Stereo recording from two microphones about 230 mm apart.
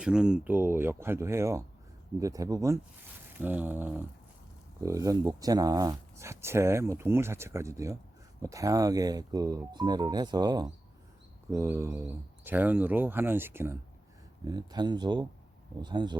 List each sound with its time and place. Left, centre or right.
0.0 s speech: centre